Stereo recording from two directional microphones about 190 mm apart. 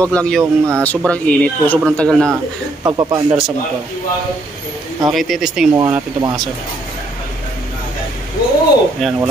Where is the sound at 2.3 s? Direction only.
20° right (ahead or behind).